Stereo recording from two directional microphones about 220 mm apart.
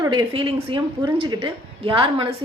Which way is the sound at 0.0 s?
20° right (ahead or behind).